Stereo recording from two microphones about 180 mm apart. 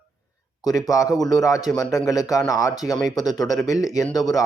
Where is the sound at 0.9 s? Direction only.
20° left (ahead or behind).